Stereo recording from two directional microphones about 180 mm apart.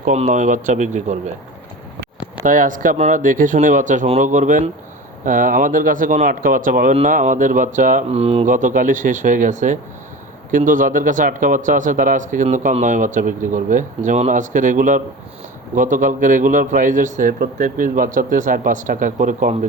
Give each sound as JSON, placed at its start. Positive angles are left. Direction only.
{"t": 0.0, "sound": "speech", "side_deg": -45}
{"t": 2.4, "sound": "speech", "side_deg": -45}